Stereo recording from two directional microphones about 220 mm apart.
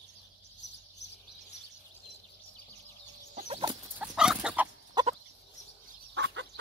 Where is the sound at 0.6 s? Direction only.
50° left (ahead or behind).